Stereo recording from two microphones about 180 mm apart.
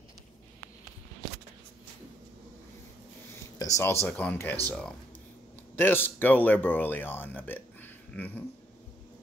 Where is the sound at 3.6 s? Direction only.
15° left (ahead or behind).